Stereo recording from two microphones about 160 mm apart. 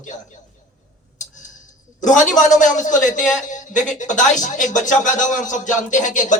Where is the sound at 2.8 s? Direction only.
50° left (ahead or behind).